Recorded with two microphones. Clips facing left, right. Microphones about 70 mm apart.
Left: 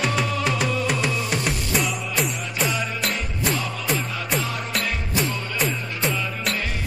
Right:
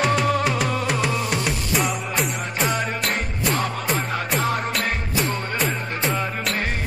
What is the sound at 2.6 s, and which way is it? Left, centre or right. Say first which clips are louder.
Music: right 1 dB; right.